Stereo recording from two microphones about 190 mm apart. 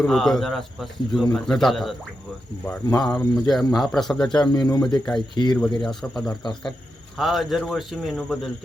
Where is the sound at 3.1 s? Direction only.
Centre (ahead or behind).